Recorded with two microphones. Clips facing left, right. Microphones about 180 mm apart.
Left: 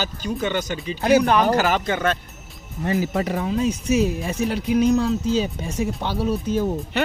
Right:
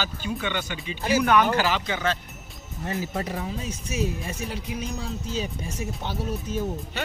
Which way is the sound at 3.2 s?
90° left.